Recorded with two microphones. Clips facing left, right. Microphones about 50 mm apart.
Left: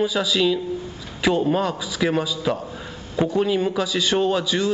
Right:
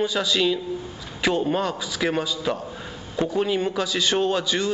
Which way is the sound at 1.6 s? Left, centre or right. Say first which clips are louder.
Left 2 dB; centre.